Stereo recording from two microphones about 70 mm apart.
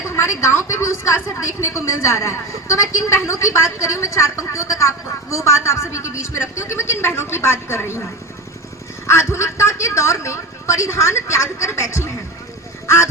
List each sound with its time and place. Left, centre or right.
0.1 s a woman's voice: left
9.0 s a woman's voice: left